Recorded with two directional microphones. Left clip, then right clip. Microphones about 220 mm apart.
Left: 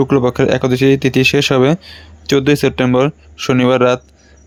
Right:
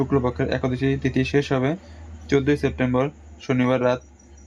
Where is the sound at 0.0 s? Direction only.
40° left (ahead or behind).